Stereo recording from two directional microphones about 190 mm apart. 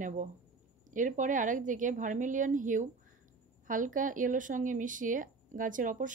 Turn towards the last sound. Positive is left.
turn(degrees=-45)  # may be behind; listen again after turning